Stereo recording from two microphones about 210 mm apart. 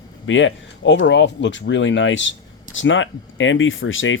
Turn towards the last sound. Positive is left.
turn(degrees=65)  # may be behind; listen again after turning